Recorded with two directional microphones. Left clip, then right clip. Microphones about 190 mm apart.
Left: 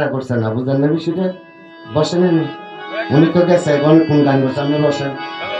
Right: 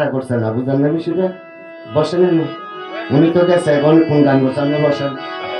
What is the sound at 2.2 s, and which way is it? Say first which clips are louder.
Speech: right 1 dB; 35° left (ahead or behind).